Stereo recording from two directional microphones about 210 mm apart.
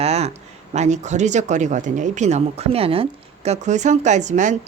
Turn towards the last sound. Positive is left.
turn(degrees=-35)  # may be behind; listen again after turning